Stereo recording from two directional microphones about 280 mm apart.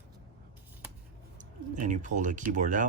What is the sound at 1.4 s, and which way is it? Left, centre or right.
Speech, right.